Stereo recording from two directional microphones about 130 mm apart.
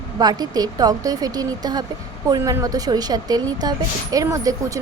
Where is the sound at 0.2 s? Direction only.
30° right (ahead or behind).